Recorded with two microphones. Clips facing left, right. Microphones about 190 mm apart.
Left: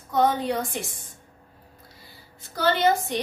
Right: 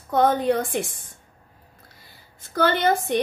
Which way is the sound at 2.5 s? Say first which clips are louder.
Right 1 dB; 55° right (ahead or behind).